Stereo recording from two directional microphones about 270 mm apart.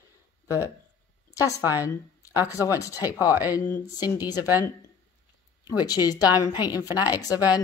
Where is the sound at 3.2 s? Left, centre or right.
Centre.